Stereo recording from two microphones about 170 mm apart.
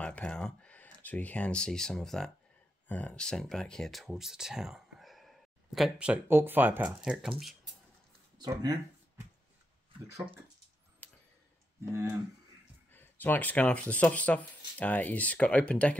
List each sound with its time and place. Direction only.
0.0 s a sound: 5° left (ahead or behind)
2.9 s speech: 10° left (ahead or behind)
8.4 s speech: 20° right (ahead or behind)
11.0 s a sound: 10° left (ahead or behind)
11.8 s speech: 15° right (ahead or behind)
12.9 s speech: 10° left (ahead or behind)